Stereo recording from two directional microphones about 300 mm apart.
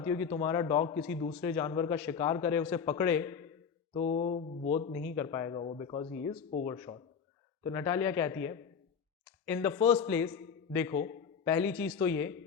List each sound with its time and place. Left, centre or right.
0.0 s a man's voice: centre
3.9 s mantra: left
5.1 s a man's voice: centre